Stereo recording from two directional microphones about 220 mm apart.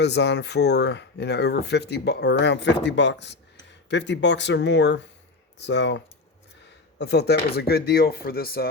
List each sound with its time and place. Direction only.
0.0 s speech: 50° left (ahead or behind)
7.0 s speech: 50° left (ahead or behind)